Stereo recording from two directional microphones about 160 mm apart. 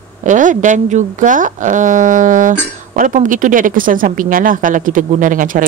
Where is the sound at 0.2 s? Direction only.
50° right (ahead or behind).